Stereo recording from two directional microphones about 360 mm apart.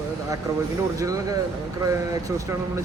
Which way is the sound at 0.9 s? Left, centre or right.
Centre.